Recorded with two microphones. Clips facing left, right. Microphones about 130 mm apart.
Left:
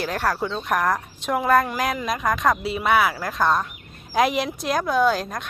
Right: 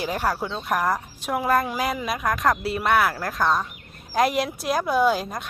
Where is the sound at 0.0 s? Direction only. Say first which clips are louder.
Left 1 dB; 10° right (ahead or behind).